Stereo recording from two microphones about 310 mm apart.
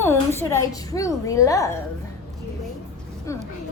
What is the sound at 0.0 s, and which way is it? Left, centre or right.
A woman's voice, centre.